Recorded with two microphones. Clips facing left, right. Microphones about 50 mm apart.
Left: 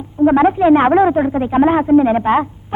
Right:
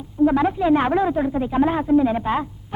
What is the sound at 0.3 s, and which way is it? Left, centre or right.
A woman's voice, left.